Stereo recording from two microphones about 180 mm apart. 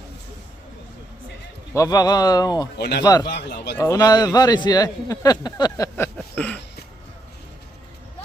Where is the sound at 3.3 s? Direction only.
70° left (ahead or behind).